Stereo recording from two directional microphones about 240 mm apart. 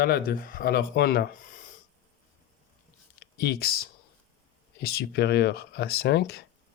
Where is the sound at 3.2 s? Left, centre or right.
Left.